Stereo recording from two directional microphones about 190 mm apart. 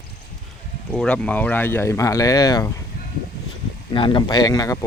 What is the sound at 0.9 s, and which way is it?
Speech, 5° left (ahead or behind).